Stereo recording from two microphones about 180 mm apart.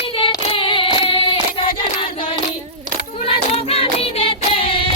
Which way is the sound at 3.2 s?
30° left (ahead or behind).